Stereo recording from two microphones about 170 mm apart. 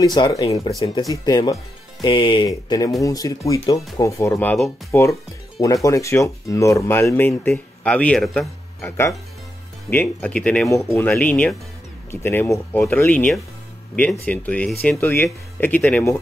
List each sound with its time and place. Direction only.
0.0 s speech: 25° left (ahead or behind); by 8.5 s centre (ahead or behind)
8.8 s speech: 15° left (ahead or behind)